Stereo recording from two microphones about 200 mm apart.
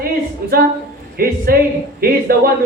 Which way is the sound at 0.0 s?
50° right (ahead or behind).